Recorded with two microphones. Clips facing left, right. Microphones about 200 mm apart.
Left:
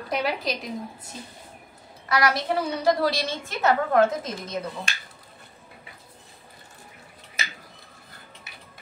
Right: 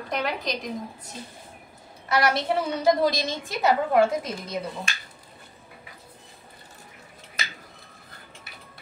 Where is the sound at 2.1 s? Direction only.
25° right (ahead or behind).